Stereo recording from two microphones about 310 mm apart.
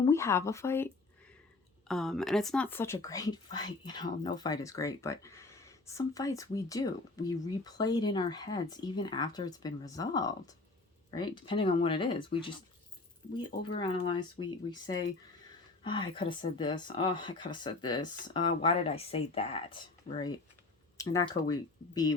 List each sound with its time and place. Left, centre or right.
0.0 s speech: centre